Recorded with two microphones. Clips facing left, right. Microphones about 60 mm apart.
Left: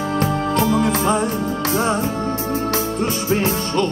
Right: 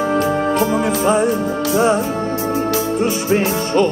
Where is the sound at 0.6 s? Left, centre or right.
Right.